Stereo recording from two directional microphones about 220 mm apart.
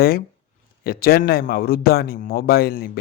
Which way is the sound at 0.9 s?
40° left (ahead or behind).